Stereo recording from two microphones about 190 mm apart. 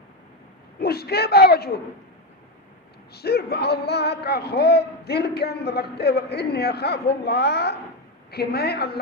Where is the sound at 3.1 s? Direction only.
55° left (ahead or behind).